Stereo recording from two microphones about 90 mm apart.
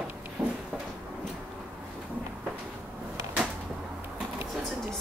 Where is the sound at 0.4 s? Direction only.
25° right (ahead or behind).